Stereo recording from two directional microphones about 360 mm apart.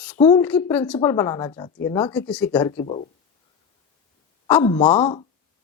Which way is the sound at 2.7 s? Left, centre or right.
Centre.